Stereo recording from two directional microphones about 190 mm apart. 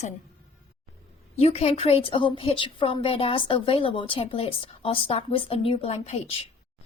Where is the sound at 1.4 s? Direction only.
35° left (ahead or behind).